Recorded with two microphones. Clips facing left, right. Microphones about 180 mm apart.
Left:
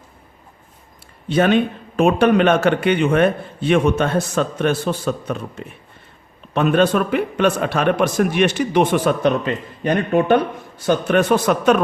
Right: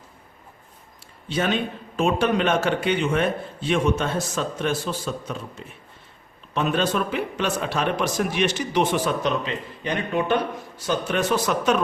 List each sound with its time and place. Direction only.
1.3 s a man's voice: 60° left (ahead or behind)